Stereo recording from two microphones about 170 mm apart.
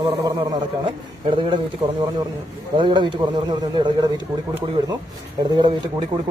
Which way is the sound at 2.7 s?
30° right (ahead or behind).